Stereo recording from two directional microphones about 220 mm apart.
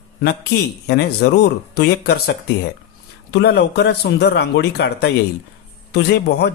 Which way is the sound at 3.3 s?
50° left (ahead or behind).